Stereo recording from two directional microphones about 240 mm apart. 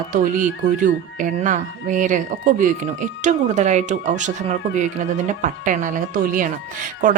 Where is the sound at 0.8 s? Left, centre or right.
Right.